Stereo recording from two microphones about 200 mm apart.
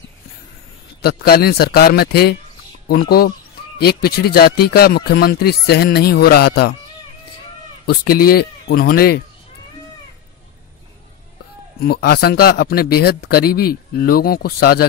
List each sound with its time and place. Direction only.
1.0 s speech: 50° left (ahead or behind)
7.8 s speech: 50° left (ahead or behind)
11.8 s speech: 50° left (ahead or behind)